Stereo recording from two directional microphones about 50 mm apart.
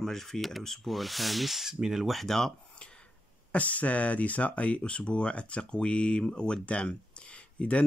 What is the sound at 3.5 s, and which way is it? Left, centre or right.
Speech, left.